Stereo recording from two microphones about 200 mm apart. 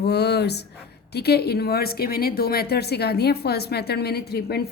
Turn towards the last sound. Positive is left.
turn(degrees=50)  # may be behind; listen again after turning